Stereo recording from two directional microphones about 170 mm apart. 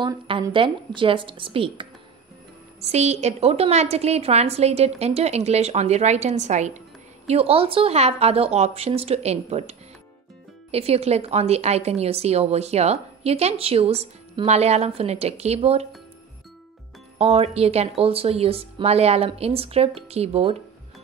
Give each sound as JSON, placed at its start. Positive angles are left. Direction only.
{"t": 0.0, "sound": "a woman's voice", "side_deg": -30}
{"t": 17.2, "sound": "a woman's voice", "side_deg": -35}